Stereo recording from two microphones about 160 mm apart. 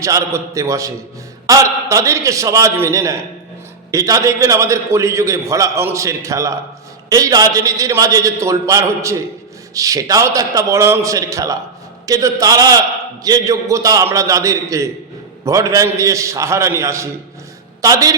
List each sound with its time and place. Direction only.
0.0 s a man's voice: 20° right (ahead or behind)